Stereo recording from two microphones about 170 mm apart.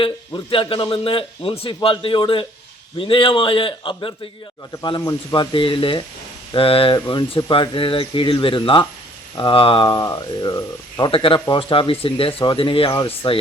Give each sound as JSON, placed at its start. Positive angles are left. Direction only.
{"t": 0.0, "sound": "a man's voice", "side_deg": 30}